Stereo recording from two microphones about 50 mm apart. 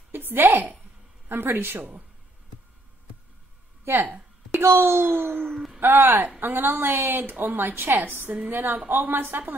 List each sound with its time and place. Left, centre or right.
0.1 s a woman's voice: right
3.9 s a child's voice: right
5.5 s speech: centre
5.8 s a child's voice: right